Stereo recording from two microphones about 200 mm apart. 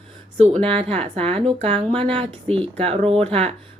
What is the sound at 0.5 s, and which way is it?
Speech, 5° left (ahead or behind).